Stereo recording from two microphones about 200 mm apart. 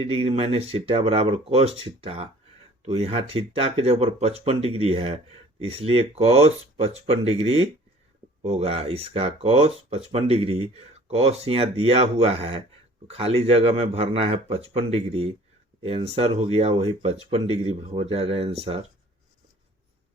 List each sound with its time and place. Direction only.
0.0 s speech: 30° right (ahead or behind)